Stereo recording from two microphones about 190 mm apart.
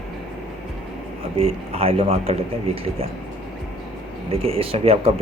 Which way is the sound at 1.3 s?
30° right (ahead or behind).